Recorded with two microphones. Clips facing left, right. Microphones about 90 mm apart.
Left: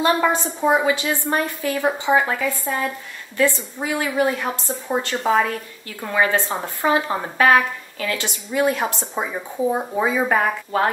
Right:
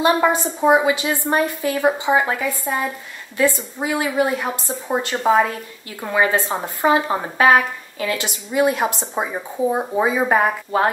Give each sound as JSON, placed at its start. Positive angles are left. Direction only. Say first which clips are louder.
{"t": 0.0, "sound": "speech", "louder": "right 2 dB", "side_deg": -15}